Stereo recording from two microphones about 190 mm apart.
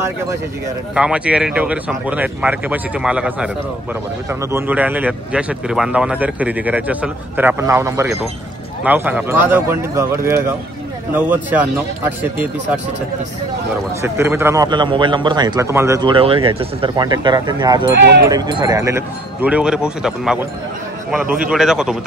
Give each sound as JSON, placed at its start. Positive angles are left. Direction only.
{"t": 0.9, "sound": "a man's voice", "side_deg": -5}
{"t": 14.0, "sound": "a man's voice", "side_deg": -15}
{"t": 17.9, "sound": "speech", "side_deg": -60}
{"t": 18.3, "sound": "a man's voice", "side_deg": -20}